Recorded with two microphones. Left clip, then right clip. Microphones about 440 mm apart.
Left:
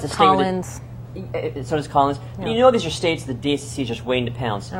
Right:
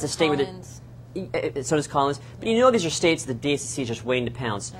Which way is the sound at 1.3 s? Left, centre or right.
Right.